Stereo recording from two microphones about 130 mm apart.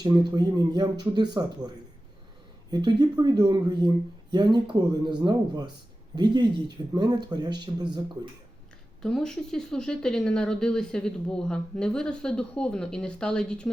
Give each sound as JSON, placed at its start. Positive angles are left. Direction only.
{"t": 0.0, "sound": "speech", "side_deg": -35}
{"t": 9.0, "sound": "speech", "side_deg": 5}